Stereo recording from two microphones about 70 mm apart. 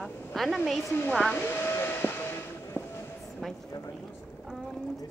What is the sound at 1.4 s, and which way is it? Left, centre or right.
Vehicle, left.